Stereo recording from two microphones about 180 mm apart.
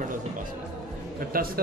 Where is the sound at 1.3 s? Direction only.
55° right (ahead or behind).